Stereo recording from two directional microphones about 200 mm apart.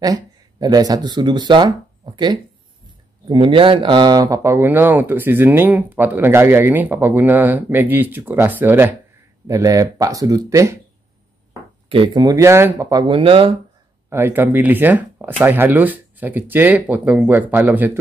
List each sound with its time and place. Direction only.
0.0 s speech: 20° right (ahead or behind)
3.3 s speech: 25° right (ahead or behind)
11.9 s speech: 25° right (ahead or behind)
14.0 s speech: 10° right (ahead or behind)